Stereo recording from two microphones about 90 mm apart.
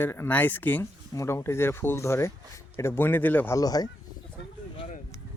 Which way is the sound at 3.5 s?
45° left (ahead or behind).